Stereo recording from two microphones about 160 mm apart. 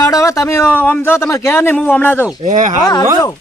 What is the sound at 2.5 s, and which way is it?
Speech, 55° right (ahead or behind).